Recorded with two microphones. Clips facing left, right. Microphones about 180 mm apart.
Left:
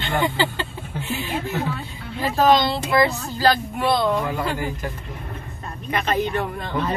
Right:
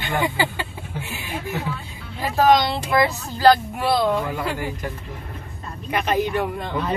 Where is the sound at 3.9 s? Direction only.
5° right (ahead or behind).